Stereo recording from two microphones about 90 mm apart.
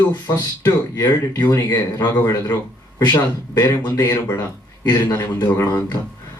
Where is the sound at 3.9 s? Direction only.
40° left (ahead or behind).